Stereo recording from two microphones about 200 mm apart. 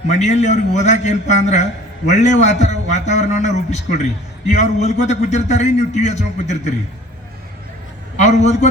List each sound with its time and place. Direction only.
0.1 s a man's voice: 35° left (ahead or behind)
8.1 s a man's voice: 35° left (ahead or behind)